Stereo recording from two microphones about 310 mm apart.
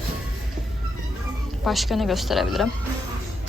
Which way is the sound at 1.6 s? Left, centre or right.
Centre.